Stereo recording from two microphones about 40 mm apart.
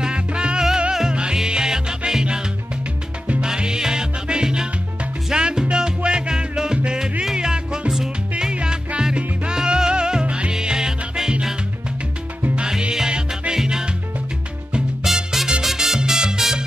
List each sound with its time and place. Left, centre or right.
0.0 s salsa music: right
1.1 s music: centre
3.3 s music: right
8.5 s music: right
9.1 s salsa music: right
10.2 s music: right
10.5 s music: centre
12.5 s music: centre
13.5 s salsa music: centre
15.0 s music: centre
15.6 s salsa music: centre